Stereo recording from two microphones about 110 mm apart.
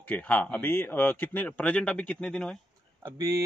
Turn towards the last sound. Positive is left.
turn(degrees=-30)  # may be behind; listen again after turning